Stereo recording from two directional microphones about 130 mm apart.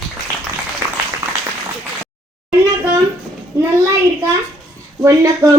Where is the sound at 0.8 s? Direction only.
20° right (ahead or behind).